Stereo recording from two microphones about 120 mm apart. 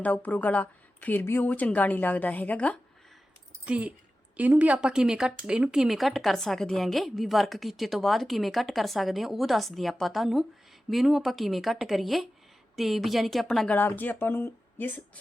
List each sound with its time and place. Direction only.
0.0 s a woman's voice: 15° left (ahead or behind)
3.7 s speech: 10° right (ahead or behind)
13.7 s a woman's voice: 15° left (ahead or behind)